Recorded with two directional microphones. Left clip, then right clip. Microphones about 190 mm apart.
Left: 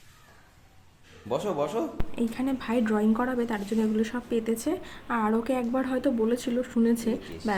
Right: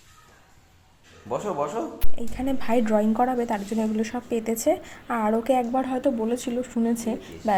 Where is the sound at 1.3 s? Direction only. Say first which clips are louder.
Right 1 dB; 15° left (ahead or behind).